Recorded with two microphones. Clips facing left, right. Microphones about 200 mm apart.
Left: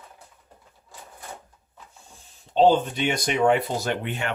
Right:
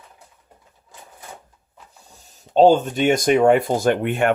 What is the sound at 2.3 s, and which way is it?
Speech, 45° right (ahead or behind).